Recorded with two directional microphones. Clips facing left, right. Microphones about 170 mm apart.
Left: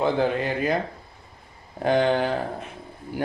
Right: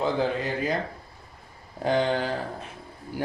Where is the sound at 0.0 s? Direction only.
60° left (ahead or behind).